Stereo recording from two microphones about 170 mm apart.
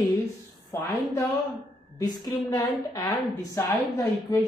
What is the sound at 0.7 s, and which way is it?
A woman's voice, 15° left (ahead or behind).